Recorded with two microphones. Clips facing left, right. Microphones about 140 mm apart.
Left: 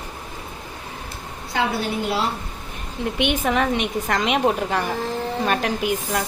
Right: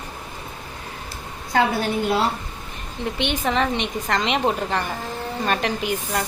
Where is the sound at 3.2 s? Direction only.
10° left (ahead or behind).